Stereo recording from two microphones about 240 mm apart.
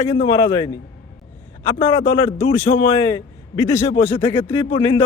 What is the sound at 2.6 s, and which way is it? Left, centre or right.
A man's voice, centre.